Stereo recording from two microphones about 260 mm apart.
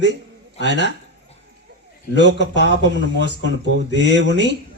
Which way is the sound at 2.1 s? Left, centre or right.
Right.